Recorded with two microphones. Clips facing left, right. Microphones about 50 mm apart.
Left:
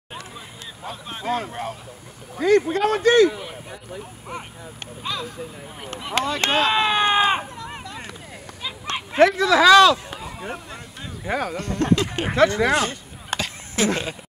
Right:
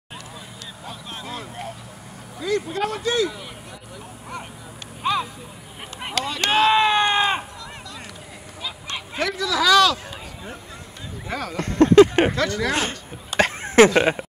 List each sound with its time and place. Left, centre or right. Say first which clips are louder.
1.2 s speech: left 9 dB; left
5.0 s a sound: right 7 dB; right
6.1 s speech: left 2 dB; left
6.5 s a sound: right 4 dB; centre
8.9 s fowl: left 11 dB; left
9.4 s speech: left 3 dB; left
10.2 s a sound: left 5 dB; left
11.2 s speech: left 5 dB; left
11.5 s speech: right 12 dB; right
12.3 s speech: left 5 dB; left
13.4 s a sound: right 13 dB; right
13.9 s speech: right 10 dB; right